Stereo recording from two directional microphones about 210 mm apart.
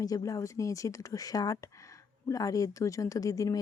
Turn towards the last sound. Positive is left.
turn(degrees=15)  # may be behind; listen again after turning